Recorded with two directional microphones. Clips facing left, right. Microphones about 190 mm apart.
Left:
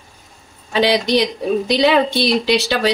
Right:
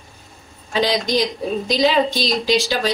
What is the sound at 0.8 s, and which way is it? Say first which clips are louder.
A woman's voice: left 4 dB; 70° left (ahead or behind).